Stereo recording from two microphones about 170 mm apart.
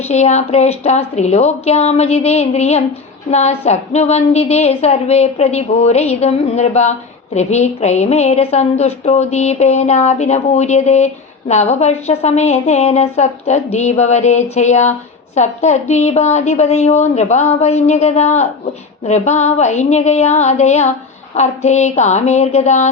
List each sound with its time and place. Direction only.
0.1 s a woman's voice: 40° left (ahead or behind)